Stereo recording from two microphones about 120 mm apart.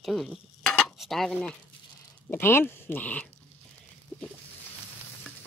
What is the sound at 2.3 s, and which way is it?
Speech, 20° left (ahead or behind).